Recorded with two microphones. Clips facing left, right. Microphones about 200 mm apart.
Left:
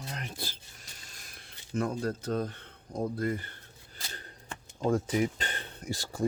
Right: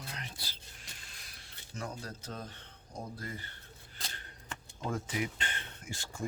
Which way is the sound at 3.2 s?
55° left (ahead or behind).